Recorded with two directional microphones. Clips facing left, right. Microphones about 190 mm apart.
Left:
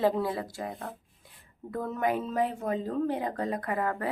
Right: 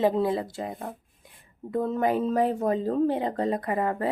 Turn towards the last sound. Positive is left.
turn(degrees=-20)  # may be behind; listen again after turning